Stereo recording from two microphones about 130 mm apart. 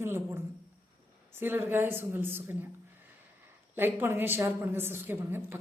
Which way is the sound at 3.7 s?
15° right (ahead or behind).